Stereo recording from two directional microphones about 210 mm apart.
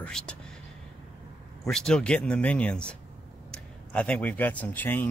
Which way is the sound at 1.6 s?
5° left (ahead or behind).